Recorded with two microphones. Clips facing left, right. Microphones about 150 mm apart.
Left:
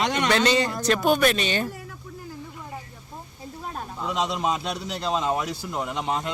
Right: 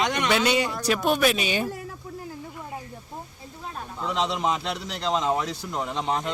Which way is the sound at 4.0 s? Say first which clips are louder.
Even; 10° left (ahead or behind).